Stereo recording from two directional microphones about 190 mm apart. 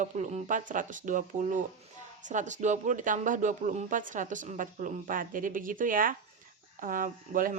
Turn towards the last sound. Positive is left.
turn(degrees=-45)  # may be behind; listen again after turning